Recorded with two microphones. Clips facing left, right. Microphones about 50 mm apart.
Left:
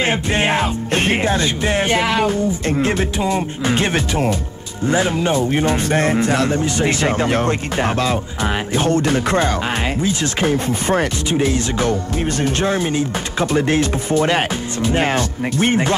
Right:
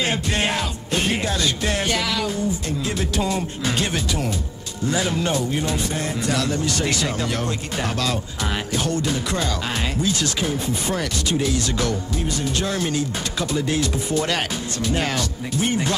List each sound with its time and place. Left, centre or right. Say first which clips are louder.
0.0 s speech: left 5 dB; left
0.9 s speech: left 5 dB; left
3.2 s speech: left 4 dB; left
6.2 s speech: left 5 dB; left
10.4 s speech: left 6 dB; left
12.3 s speech: left 5 dB; left
12.6 s speech: left 5 dB; left
13.5 s speech: left 6 dB; left